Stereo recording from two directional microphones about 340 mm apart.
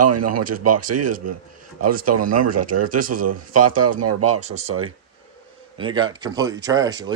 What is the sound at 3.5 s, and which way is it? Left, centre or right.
Speech, right.